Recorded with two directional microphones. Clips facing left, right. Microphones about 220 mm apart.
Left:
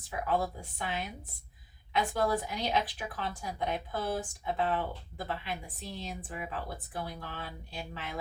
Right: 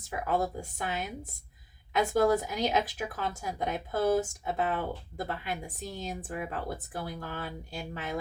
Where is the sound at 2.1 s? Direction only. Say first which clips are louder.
Right 7 dB; 45° right (ahead or behind).